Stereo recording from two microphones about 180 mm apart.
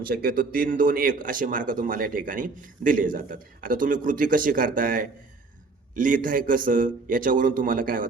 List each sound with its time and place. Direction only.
0.0 s speech: 55° right (ahead or behind)